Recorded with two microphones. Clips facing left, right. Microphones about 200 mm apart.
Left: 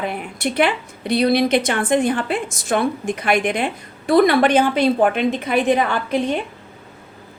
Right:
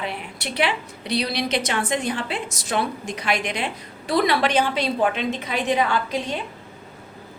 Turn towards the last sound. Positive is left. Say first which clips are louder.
# left 5 dB
turn(degrees=55)  # may be behind; listen again after turning